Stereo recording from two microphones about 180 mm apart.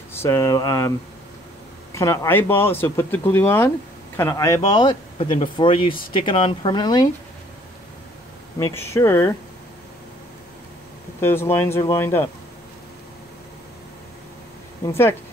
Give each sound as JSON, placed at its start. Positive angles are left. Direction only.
{"t": 0.1, "sound": "speech", "side_deg": 15}
{"t": 2.0, "sound": "speech", "side_deg": 15}
{"t": 4.7, "sound": "speech", "side_deg": 25}
{"t": 8.5, "sound": "speech", "side_deg": 20}
{"t": 11.1, "sound": "speech", "side_deg": 15}